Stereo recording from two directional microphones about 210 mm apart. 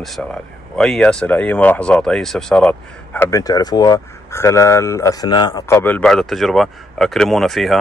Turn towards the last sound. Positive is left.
turn(degrees=0)  # may be behind; listen again after turning